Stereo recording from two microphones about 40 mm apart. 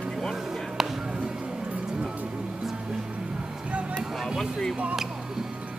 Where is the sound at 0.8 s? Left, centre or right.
Centre.